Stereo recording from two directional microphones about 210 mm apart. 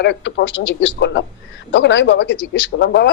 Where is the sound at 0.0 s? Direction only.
55° left (ahead or behind).